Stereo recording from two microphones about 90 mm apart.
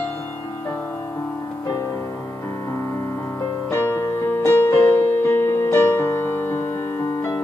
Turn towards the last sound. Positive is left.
turn(degrees=25)  # may be behind; listen again after turning